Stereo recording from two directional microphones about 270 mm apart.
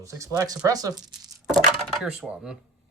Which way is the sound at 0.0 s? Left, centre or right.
Centre.